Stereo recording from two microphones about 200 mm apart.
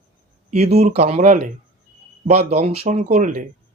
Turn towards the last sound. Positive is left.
turn(degrees=-35)  # may be behind; listen again after turning